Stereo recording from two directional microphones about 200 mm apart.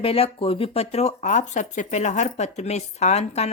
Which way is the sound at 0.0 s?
30° left (ahead or behind).